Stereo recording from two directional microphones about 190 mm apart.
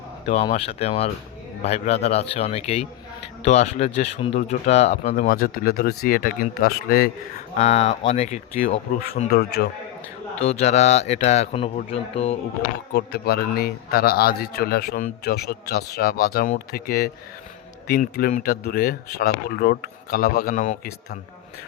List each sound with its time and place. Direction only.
0.3 s speech: 30° left (ahead or behind); by 7.1 s 50° left (ahead or behind)
7.5 s speech: 35° left (ahead or behind)
9.3 s a man's voice: 55° left (ahead or behind)
10.3 s speech: 30° left (ahead or behind)
12.9 s a man's voice: 60° left (ahead or behind); by 20.7 s 40° left (ahead or behind)